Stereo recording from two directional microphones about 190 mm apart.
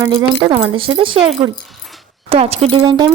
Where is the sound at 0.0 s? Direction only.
20° right (ahead or behind).